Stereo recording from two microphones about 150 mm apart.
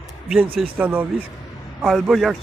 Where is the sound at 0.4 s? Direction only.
40° right (ahead or behind).